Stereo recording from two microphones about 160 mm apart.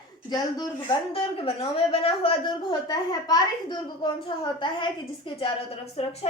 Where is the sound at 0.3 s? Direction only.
25° left (ahead or behind).